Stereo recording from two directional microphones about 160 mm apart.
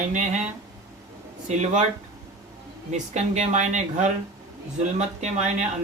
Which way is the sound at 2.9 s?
45° right (ahead or behind).